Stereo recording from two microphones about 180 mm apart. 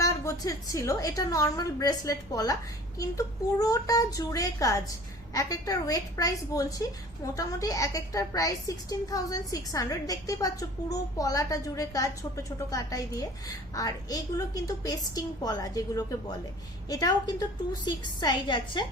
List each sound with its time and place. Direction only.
0.0 s a woman's voice: 20° left (ahead or behind)